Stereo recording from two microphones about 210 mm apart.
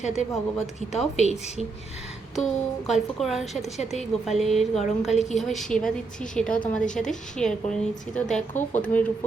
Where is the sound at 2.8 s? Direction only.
Centre (ahead or behind).